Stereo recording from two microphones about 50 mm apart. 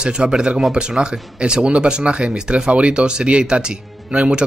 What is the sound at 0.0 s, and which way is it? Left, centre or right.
Speech, centre.